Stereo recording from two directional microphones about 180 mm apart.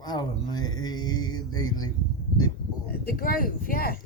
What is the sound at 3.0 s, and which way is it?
Speech, 55° left (ahead or behind).